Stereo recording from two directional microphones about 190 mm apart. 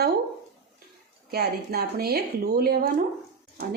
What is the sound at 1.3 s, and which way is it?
A woman's voice, 55° right (ahead or behind).